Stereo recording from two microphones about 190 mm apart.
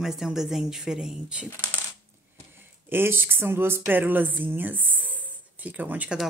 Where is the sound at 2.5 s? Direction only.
10° right (ahead or behind).